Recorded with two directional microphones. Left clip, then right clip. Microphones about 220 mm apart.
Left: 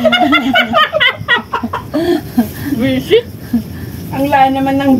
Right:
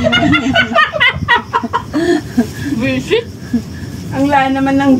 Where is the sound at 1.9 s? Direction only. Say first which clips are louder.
Left 1 dB; 30° left (ahead or behind).